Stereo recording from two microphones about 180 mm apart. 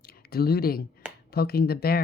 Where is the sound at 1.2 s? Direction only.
60° left (ahead or behind).